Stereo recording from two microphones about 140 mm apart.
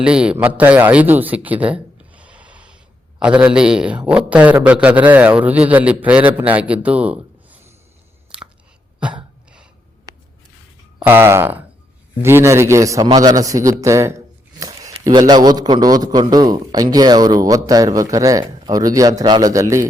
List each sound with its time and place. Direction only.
0.0 s a man's voice: 5° right (ahead or behind)
10.1 s a sound: 25° right (ahead or behind)
11.0 s a man's voice: 15° right (ahead or behind)